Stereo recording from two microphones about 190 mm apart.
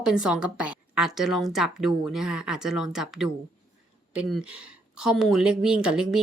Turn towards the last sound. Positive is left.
turn(degrees=-5)  # may be behind; listen again after turning